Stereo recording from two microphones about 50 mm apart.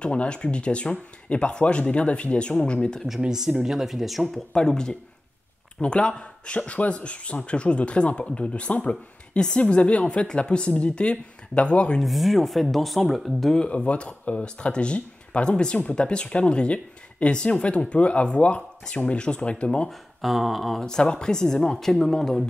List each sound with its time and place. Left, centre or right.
0.0 s speech: left
3.2 s speech: centre
4.6 s speech: centre
12.0 s speech: centre
13.6 s speech: left
19.9 s speech: centre
20.8 s speech: centre